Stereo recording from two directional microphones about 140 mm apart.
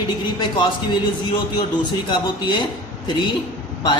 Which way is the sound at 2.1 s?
30° left (ahead or behind).